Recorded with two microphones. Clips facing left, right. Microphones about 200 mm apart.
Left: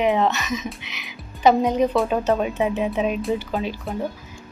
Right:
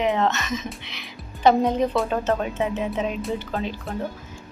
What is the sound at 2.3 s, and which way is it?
A woman's voice, 15° left (ahead or behind).